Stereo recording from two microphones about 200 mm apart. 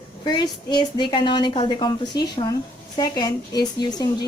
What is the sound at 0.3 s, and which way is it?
A woman's voice, 20° left (ahead or behind).